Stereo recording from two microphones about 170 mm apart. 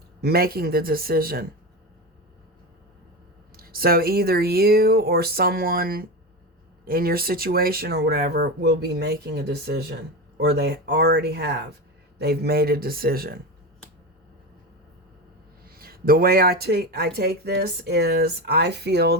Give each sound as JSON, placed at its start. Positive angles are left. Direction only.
{"t": 0.2, "sound": "speech", "side_deg": -65}
{"t": 3.6, "sound": "speech", "side_deg": -60}
{"t": 15.6, "sound": "speech", "side_deg": -60}